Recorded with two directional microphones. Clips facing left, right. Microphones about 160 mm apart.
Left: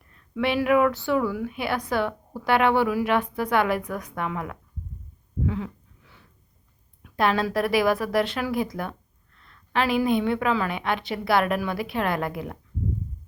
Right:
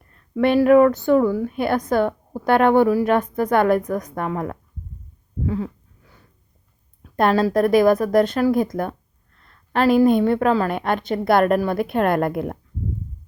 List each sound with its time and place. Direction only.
0.1 s a woman's voice: 45° right (ahead or behind)
5.5 s a sound: 40° right (ahead or behind)
7.2 s a woman's voice: 45° right (ahead or behind)